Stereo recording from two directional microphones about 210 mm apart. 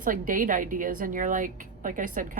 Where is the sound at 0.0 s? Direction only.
40° right (ahead or behind).